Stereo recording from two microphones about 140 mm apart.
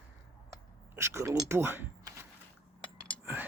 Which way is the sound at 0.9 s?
20° right (ahead or behind).